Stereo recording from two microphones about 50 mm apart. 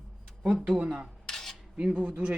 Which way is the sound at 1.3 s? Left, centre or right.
Centre.